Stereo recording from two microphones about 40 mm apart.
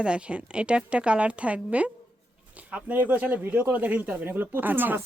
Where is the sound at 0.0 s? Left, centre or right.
Right.